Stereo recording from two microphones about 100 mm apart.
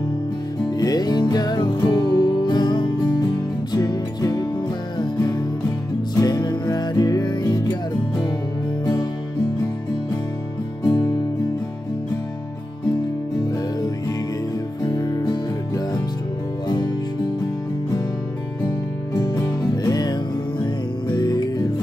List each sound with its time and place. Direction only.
0.7 s music: 40° left (ahead or behind)
6.1 s music: 40° left (ahead or behind)
14.9 s music: 40° left (ahead or behind)
19.1 s music: 35° left (ahead or behind)